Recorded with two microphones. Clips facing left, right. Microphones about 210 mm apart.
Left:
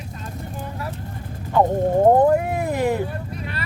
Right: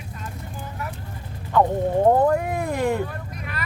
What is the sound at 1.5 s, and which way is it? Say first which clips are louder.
Frog: left 2 dB; 20° left (ahead or behind).